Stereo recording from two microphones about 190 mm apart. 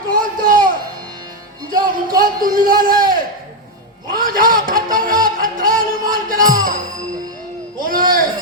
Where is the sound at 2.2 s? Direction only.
50° right (ahead or behind).